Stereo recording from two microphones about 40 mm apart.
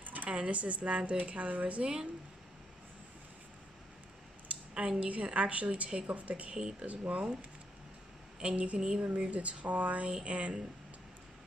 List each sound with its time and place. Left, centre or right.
0.0 s a sound: right
0.3 s a woman's voice: right
1.8 s a woman's voice: centre
4.7 s a woman's voice: right
5.0 s a woman's voice: right
8.4 s a woman's voice: right
8.7 s a woman's voice: centre
9.0 s a woman's voice: right